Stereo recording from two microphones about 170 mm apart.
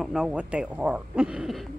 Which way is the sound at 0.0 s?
5° right (ahead or behind).